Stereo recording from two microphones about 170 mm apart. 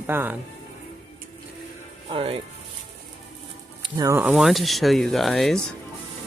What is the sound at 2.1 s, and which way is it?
Speech, 30° right (ahead or behind).